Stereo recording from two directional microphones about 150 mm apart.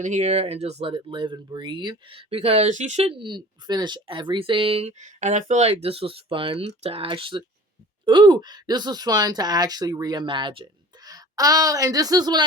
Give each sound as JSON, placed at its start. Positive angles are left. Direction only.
{"t": 0.0, "sound": "speech", "side_deg": -50}